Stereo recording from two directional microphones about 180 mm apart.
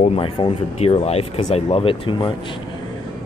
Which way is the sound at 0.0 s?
30° left (ahead or behind).